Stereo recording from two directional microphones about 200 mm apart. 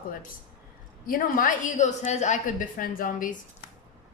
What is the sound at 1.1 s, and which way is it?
A woman's voice, 45° left (ahead or behind).